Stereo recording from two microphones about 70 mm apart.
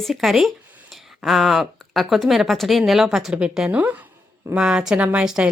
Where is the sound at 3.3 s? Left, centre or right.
Centre.